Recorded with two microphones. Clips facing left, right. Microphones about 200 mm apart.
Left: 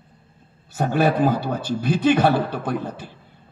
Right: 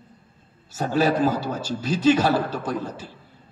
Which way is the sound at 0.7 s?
60° left (ahead or behind).